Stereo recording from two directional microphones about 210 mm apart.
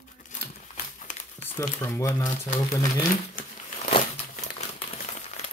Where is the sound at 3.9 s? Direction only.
30° left (ahead or behind).